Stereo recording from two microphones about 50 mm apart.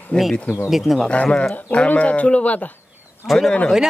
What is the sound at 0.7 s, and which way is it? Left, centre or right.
Speech, centre.